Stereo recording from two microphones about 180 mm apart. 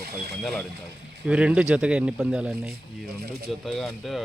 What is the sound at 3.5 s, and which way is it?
Speech, centre (ahead or behind).